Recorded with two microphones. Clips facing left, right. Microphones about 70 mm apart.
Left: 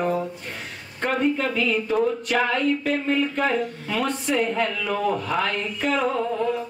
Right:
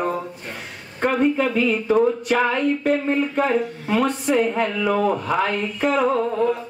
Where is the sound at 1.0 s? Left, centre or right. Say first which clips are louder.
Right 4 dB; right.